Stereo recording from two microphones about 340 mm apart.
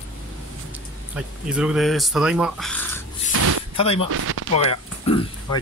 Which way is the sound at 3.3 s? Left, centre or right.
Right.